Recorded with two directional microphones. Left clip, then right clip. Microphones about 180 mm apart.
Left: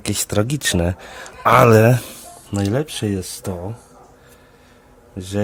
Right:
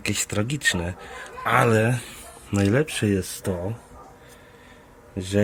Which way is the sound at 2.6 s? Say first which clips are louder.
Even; 5° left (ahead or behind).